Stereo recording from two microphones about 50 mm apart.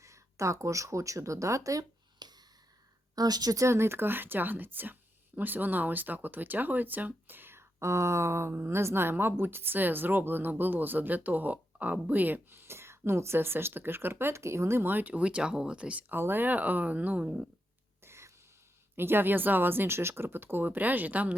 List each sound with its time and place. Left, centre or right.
0.0 s speech: right
3.6 s speech: right
7.8 s speech: right
12.5 s speech: right
14.8 s speech: right
16.0 s speech: right
18.0 s a sound: right
18.9 s speech: right